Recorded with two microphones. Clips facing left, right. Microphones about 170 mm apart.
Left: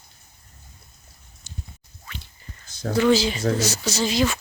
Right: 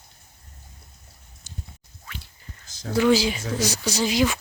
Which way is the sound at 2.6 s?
60° left (ahead or behind).